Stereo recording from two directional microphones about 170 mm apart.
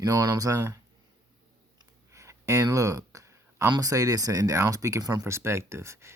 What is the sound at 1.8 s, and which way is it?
Speech, 15° right (ahead or behind).